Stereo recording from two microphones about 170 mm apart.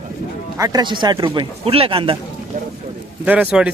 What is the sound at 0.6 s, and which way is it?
Speech, 25° right (ahead or behind).